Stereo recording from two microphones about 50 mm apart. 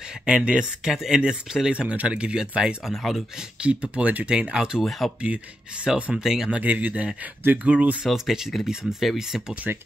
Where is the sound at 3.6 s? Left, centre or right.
Right.